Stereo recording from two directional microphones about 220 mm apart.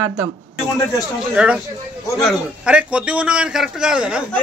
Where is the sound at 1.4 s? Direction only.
5° right (ahead or behind).